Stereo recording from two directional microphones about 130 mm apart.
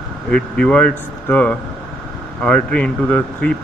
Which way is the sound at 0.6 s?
10° left (ahead or behind).